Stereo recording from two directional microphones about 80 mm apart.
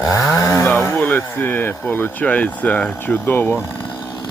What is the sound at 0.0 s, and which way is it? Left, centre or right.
Chainsaw, centre.